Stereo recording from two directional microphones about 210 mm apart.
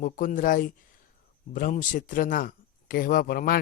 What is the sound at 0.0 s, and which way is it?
Speech, 40° left (ahead or behind).